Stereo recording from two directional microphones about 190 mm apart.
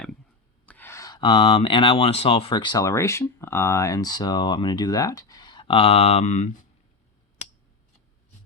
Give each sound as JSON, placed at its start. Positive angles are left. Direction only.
{"t": 0.6, "sound": "speech", "side_deg": 10}